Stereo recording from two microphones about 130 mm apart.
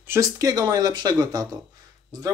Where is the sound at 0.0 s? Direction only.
20° right (ahead or behind).